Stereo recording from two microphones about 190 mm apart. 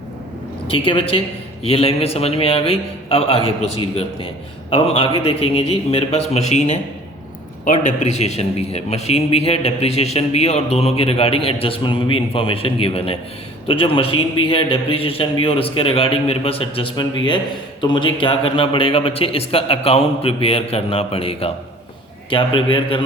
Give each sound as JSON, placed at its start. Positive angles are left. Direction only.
{"t": 0.7, "sound": "a man's voice", "side_deg": 30}